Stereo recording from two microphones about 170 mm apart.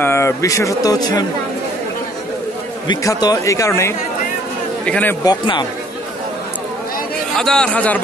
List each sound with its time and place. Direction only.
0.0 s speech: 15° left (ahead or behind)
2.9 s a man's voice: 20° left (ahead or behind)
5.2 s speech: 25° left (ahead or behind)
7.3 s speech: 5° left (ahead or behind)